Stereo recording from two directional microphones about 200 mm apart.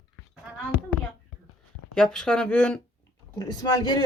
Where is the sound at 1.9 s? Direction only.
5° left (ahead or behind).